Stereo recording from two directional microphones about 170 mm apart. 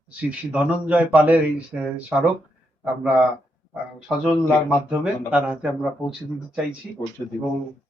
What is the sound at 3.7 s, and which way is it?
Speech, 5° right (ahead or behind).